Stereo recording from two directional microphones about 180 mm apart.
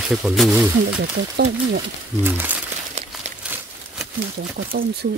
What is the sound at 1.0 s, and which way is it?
Speech, 70° right (ahead or behind).